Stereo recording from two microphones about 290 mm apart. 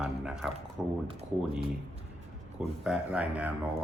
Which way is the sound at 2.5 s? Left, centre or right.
Centre.